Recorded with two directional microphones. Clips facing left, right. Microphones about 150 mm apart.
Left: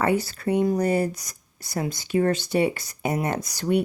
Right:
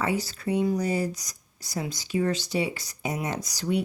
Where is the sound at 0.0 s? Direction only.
55° left (ahead or behind).